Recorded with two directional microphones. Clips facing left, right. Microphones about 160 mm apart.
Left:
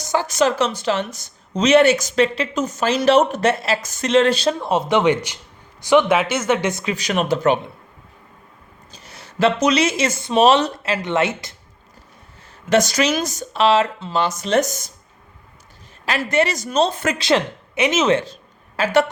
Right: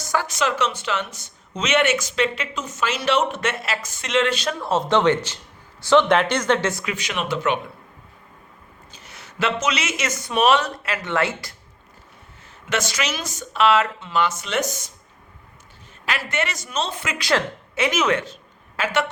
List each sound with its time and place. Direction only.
0.0 s a sound: 25° left (ahead or behind)
0.3 s speech: 40° left (ahead or behind)
4.6 s speech: 15° left (ahead or behind)
6.7 s a woman's voice: 20° left (ahead or behind)
6.9 s speech: 40° left (ahead or behind)
8.9 s speech: 35° left (ahead or behind)
12.7 s speech: 40° left (ahead or behind)
16.0 s speech: 35° left (ahead or behind)
17.2 s a woman's voice: 20° left (ahead or behind); by 19.1 s 35° left (ahead or behind)